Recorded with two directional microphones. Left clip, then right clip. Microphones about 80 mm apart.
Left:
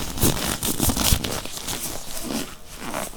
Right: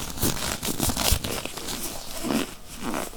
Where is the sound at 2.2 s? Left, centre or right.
Centre.